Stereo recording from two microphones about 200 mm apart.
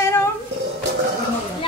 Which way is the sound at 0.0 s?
15° left (ahead or behind).